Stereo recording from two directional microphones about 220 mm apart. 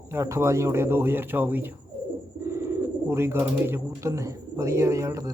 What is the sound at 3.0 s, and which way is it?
Speech, 10° right (ahead or behind).